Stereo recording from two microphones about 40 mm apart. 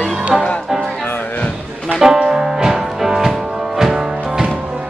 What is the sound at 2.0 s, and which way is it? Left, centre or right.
Music, centre.